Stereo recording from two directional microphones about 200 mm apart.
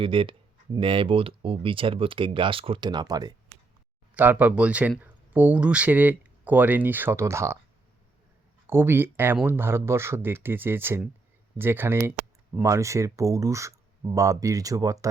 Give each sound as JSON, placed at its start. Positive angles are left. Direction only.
{"t": 0.0, "sound": "speech", "side_deg": -25}
{"t": 4.1, "sound": "speech", "side_deg": -10}
{"t": 8.6, "sound": "speech", "side_deg": -10}